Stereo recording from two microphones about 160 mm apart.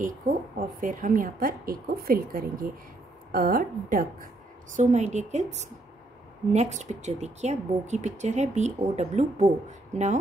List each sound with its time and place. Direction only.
0.0 s a woman's voice: 55° right (ahead or behind)
4.7 s a woman's voice: 45° right (ahead or behind)
6.5 s a woman's voice: 45° right (ahead or behind)